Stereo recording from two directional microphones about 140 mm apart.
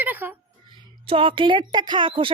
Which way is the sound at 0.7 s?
40° right (ahead or behind).